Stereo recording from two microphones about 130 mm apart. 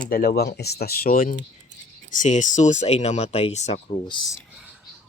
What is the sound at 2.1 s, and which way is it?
Speech, 75° left (ahead or behind).